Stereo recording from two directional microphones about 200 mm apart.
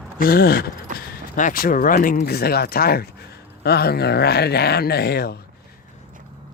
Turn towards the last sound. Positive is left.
turn(degrees=55)  # may be behind; listen again after turning